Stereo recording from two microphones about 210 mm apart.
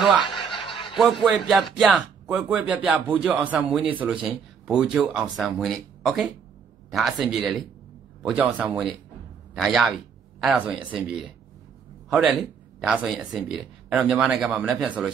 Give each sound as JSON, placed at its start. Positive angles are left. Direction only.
{"t": 0.7, "sound": "snicker", "side_deg": 25}
{"t": 0.9, "sound": "speech", "side_deg": 0}